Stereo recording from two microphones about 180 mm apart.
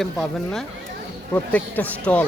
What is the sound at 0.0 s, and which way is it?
Speech, centre (ahead or behind).